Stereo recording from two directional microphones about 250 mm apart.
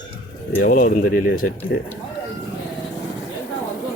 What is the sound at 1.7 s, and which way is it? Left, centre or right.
Speech, left.